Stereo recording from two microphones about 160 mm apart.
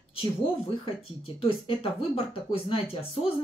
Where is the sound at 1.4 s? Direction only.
35° left (ahead or behind).